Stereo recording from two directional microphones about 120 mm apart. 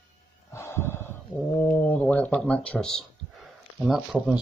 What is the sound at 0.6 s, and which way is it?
Gasp, 20° left (ahead or behind).